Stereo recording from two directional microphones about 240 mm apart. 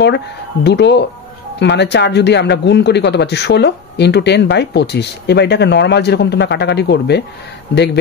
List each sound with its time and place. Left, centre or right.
0.7 s speech: left